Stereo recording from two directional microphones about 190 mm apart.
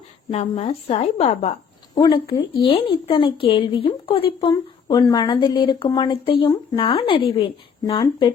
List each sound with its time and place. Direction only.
0.3 s a woman's voice: 35° left (ahead or behind)
2.0 s speech: 20° left (ahead or behind)
7.9 s speech: 20° left (ahead or behind)